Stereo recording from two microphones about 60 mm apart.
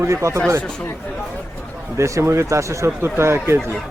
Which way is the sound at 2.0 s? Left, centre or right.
Right.